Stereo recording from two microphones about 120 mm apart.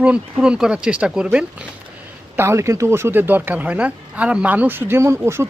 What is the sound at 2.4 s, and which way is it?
Speech, 25° right (ahead or behind).